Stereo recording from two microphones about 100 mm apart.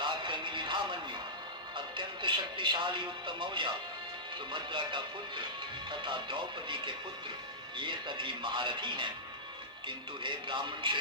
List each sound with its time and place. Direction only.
0.0 s music: 55° right (ahead or behind)
1.7 s speech: 55° right (ahead or behind)